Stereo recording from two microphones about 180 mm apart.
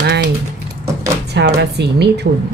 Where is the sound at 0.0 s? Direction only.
65° right (ahead or behind).